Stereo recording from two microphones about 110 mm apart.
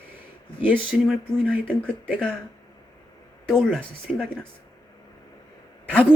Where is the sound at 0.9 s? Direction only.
Centre (ahead or behind).